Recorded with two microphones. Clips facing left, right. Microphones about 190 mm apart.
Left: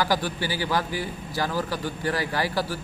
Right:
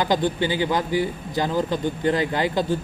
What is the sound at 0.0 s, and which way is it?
A man's voice, 20° right (ahead or behind).